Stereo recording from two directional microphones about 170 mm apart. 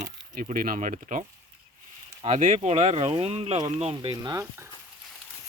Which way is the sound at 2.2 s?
45° right (ahead or behind).